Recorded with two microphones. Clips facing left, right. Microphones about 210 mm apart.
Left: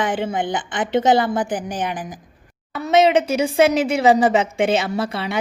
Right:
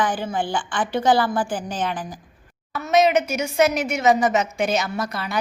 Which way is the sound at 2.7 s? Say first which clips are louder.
Left 3 dB; 25° left (ahead or behind).